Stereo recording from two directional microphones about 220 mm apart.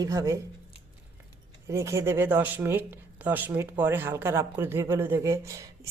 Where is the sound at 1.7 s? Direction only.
15° right (ahead or behind).